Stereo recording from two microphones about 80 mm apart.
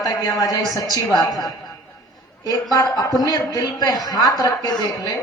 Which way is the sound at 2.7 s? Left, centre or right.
Left.